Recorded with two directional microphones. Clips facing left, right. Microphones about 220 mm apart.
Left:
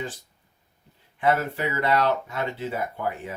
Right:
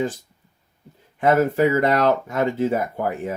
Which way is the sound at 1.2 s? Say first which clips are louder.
Right 7 dB; 45° right (ahead or behind).